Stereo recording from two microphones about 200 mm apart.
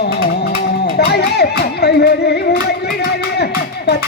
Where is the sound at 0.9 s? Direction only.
55° left (ahead or behind).